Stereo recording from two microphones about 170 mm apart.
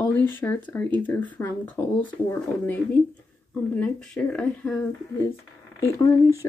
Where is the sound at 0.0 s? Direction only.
10° left (ahead or behind).